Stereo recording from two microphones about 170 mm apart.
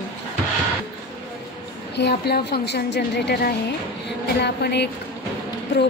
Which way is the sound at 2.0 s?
75° left (ahead or behind).